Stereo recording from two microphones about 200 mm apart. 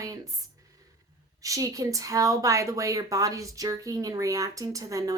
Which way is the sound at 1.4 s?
15° right (ahead or behind).